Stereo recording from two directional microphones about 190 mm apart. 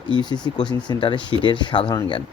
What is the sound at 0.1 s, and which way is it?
Speech, 25° left (ahead or behind).